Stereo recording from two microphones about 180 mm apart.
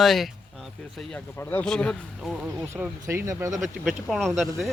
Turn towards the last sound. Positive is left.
turn(degrees=0)  # may be behind; listen again after turning